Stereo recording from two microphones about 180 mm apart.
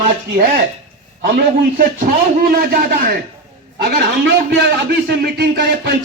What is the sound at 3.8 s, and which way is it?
Speech, 65° right (ahead or behind).